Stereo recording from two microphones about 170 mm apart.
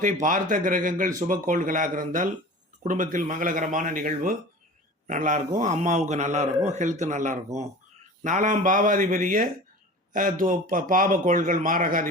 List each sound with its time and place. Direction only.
0.0 s speech: 50° right (ahead or behind)